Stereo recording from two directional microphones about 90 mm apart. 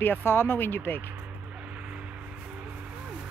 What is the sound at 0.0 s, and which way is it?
Speech, 25° left (ahead or behind).